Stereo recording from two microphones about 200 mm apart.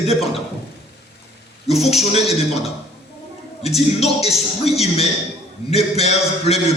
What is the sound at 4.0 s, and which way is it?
Music, 30° left (ahead or behind).